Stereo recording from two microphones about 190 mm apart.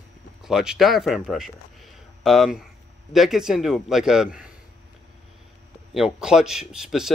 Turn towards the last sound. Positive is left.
turn(degrees=-5)  # may be behind; listen again after turning